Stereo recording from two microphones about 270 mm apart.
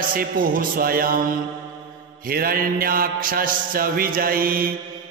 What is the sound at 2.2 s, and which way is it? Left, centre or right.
Mantra, right.